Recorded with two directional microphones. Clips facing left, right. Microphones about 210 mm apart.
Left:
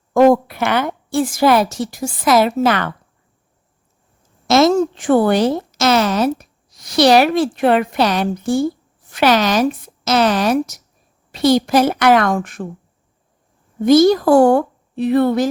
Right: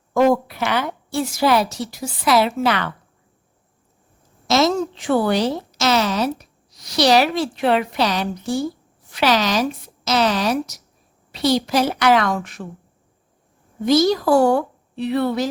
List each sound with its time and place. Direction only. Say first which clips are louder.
0.1 s a woman's voice: left 5 dB; 55° left (ahead or behind)
4.4 s a woman's voice: left 5 dB; 55° left (ahead or behind)
13.8 s a woman's voice: left 5 dB; 50° left (ahead or behind)